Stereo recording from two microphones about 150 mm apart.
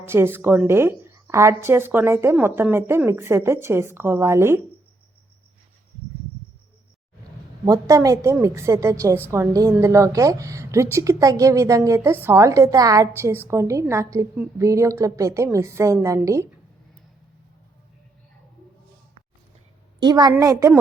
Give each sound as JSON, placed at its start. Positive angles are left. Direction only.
{"t": 0.0, "sound": "a woman's voice", "side_deg": -15}
{"t": 7.6, "sound": "a woman's voice", "side_deg": -20}
{"t": 20.0, "sound": "a woman's voice", "side_deg": -25}